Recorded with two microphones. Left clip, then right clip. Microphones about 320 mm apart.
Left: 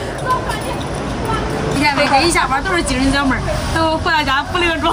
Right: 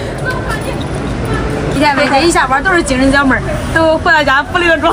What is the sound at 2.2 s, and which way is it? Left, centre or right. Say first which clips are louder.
Speech: right 5 dB; centre.